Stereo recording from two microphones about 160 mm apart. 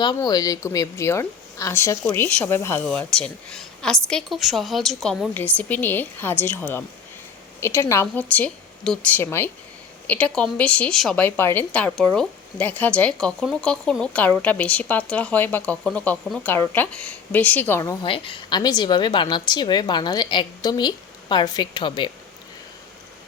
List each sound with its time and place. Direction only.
0.0 s a woman's voice: 25° left (ahead or behind); by 5.3 s centre (ahead or behind)
5.3 s a woman's voice: 10° left (ahead or behind)
18.0 s speech: 30° left (ahead or behind)